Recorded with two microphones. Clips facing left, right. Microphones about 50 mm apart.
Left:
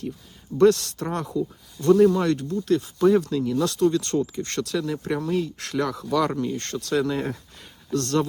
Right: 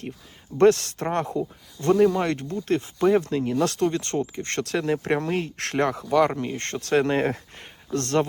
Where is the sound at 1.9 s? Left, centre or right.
Centre; by 3.8 s right.